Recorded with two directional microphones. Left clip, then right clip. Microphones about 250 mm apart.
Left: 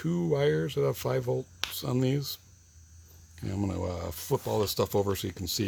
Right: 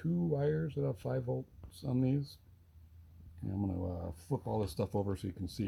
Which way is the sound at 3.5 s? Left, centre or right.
Left.